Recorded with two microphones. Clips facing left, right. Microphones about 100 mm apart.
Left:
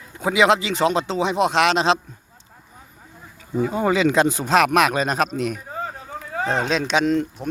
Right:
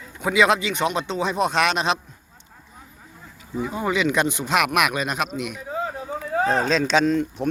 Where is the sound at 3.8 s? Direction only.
30° left (ahead or behind).